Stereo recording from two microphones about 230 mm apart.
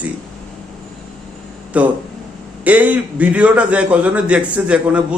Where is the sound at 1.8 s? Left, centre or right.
Centre.